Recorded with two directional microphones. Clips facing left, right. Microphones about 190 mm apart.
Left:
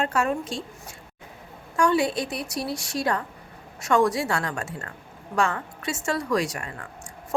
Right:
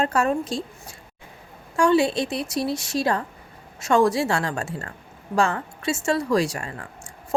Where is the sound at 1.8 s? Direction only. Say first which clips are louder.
Right 3 dB; 25° right (ahead or behind).